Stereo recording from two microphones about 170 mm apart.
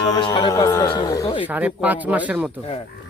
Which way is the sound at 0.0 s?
25° left (ahead or behind).